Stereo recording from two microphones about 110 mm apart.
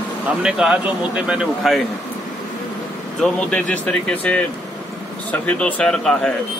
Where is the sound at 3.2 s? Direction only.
10° left (ahead or behind).